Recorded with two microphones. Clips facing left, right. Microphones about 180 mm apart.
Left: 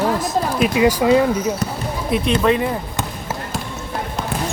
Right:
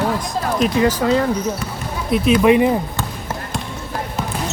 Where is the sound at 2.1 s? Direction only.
Centre (ahead or behind).